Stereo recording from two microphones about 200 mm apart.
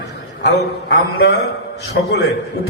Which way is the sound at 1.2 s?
55° left (ahead or behind).